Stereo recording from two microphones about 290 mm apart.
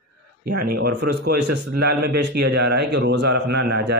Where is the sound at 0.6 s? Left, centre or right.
Right.